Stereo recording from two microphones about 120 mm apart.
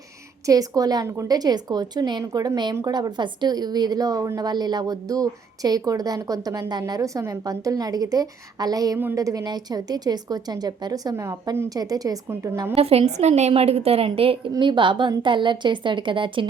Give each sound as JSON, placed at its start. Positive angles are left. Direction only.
{"t": 0.4, "sound": "a woman's voice", "side_deg": -30}
{"t": 12.7, "sound": "a woman's voice", "side_deg": -55}